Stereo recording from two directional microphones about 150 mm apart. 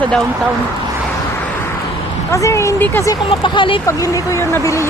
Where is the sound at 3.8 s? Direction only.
20° left (ahead or behind).